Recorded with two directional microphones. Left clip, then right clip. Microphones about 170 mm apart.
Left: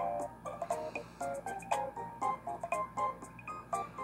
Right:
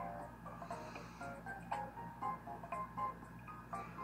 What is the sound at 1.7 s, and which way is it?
Music, 55° left (ahead or behind).